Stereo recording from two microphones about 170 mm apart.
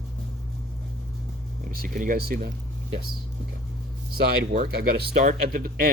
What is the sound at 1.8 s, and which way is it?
Speech, 55° right (ahead or behind).